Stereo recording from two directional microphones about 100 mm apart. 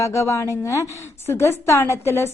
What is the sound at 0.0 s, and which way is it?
A woman's voice, 30° left (ahead or behind).